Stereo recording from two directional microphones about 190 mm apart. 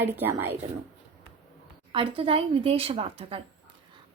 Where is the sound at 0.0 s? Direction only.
10° right (ahead or behind).